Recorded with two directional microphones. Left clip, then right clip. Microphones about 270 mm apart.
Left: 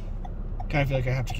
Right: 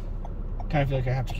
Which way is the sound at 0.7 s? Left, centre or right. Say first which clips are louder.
Left 1 dB; left.